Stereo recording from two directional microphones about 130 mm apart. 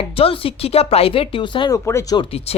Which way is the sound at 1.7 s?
20° left (ahead or behind).